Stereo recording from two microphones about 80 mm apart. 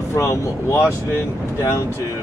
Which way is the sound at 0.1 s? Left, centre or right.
Left.